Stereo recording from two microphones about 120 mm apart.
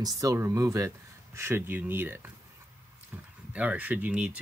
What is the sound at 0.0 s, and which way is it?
Speech, 25° right (ahead or behind).